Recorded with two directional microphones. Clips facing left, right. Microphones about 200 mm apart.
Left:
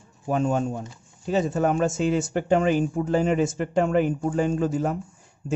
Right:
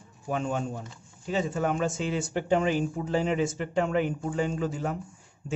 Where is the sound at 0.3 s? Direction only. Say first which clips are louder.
Left 6 dB; 40° left (ahead or behind).